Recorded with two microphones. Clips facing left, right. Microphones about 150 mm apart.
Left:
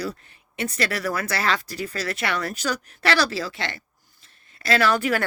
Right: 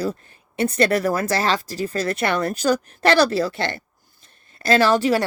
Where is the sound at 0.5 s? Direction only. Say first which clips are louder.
Right 7 dB; 30° right (ahead or behind).